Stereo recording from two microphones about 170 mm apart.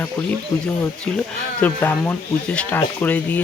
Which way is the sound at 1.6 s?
10° left (ahead or behind).